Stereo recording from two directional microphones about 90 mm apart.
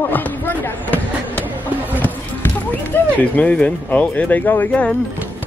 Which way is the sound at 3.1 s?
15° left (ahead or behind).